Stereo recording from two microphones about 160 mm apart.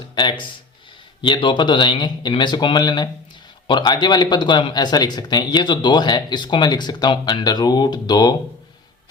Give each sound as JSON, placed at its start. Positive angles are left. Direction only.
{"t": 0.2, "sound": "speech", "side_deg": 30}